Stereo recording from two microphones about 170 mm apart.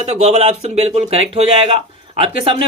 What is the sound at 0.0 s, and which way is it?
Speech, 40° right (ahead or behind).